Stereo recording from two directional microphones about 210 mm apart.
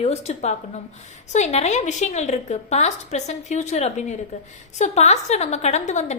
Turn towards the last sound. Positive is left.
turn(degrees=35)  # may be behind; listen again after turning